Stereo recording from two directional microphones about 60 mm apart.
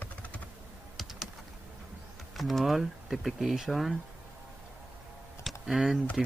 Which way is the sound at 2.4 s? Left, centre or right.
Centre.